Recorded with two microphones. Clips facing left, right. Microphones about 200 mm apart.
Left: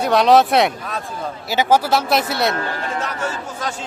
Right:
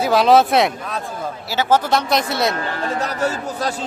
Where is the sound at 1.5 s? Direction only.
15° left (ahead or behind).